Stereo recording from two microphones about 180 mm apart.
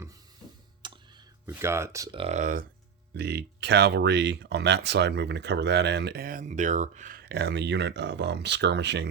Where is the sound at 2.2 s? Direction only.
40° right (ahead or behind).